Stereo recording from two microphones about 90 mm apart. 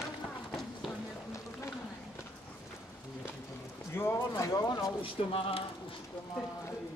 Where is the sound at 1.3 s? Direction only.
30° left (ahead or behind).